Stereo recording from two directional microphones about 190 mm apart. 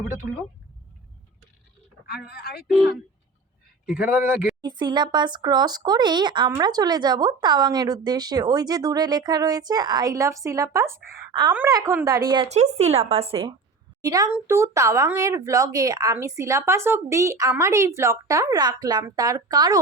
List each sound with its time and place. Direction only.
2.0 s speech: 55° left (ahead or behind)
4.0 s speech: 5° right (ahead or behind)
4.6 s speech: 25° right (ahead or behind)
12.5 s a woman's voice: 35° right (ahead or behind); by 19.8 s 20° right (ahead or behind)